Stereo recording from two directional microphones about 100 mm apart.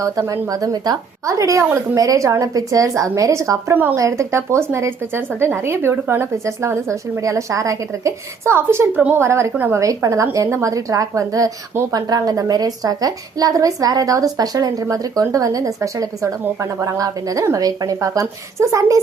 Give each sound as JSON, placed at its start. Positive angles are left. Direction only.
{"t": 0.0, "sound": "a woman's voice", "side_deg": -35}
{"t": 9.0, "sound": "a woman's voice", "side_deg": -15}
{"t": 9.2, "sound": "a woman's voice", "side_deg": -25}